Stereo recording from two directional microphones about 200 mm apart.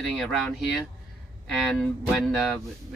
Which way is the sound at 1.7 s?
Centre (ahead or behind).